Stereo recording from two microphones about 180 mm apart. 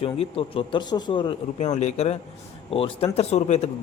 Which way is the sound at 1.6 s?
40° left (ahead or behind).